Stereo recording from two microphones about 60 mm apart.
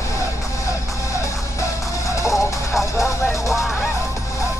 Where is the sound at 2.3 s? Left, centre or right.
Centre.